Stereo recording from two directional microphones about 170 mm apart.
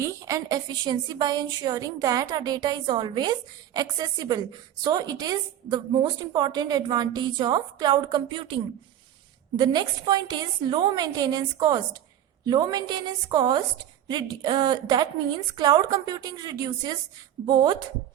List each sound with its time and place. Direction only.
0.0 s a woman's voice: 20° right (ahead or behind)